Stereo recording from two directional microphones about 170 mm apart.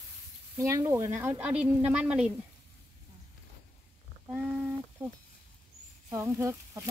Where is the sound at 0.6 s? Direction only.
15° right (ahead or behind).